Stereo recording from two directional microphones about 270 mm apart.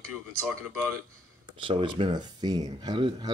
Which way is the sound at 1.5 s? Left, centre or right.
Centre.